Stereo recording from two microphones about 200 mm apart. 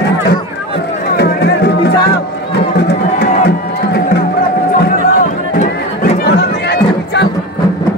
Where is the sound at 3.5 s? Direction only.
55° left (ahead or behind).